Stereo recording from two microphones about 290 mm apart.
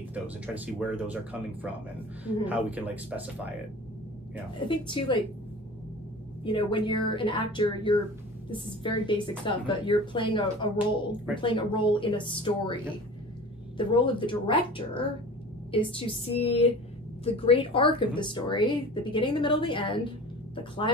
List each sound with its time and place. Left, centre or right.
0.7 s speech: centre
4.6 s speech: centre
6.4 s speech: centre
13.7 s a woman's voice: centre